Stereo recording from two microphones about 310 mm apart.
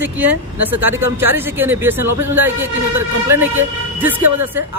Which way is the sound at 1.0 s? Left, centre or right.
Centre.